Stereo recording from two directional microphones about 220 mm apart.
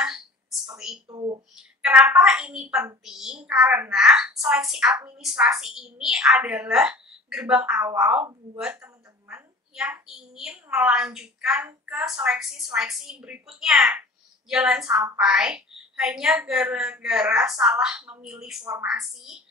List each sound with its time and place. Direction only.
0.0 s a sound: 5° right (ahead or behind)
1.0 s speech: 20° right (ahead or behind)
1.8 s a woman's voice: 5° right (ahead or behind)